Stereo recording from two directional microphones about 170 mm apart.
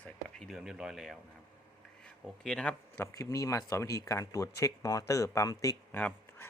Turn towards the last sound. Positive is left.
turn(degrees=10)  # may be behind; listen again after turning